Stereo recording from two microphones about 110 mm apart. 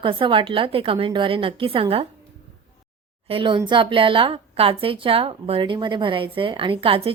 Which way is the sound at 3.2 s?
50° right (ahead or behind).